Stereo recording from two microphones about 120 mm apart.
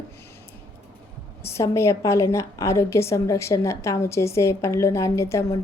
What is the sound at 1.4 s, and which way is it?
A woman's voice, 25° left (ahead or behind).